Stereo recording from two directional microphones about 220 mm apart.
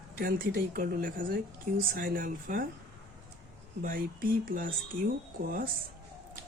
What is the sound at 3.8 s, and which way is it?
Speech, 40° right (ahead or behind).